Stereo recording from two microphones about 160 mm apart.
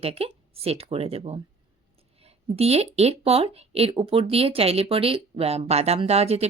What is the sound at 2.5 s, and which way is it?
Speech, 40° right (ahead or behind).